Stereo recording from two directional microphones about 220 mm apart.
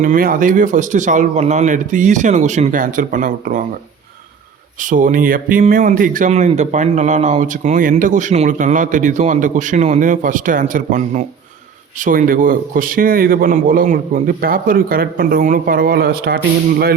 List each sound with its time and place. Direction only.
0.0 s speech: 40° right (ahead or behind)
4.8 s speech: 35° right (ahead or behind)